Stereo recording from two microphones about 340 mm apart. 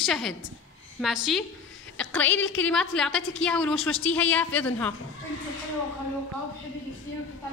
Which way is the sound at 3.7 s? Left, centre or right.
Left.